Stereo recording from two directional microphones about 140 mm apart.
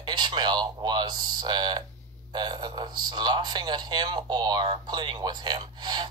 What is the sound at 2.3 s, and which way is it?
A man's voice, 35° right (ahead or behind).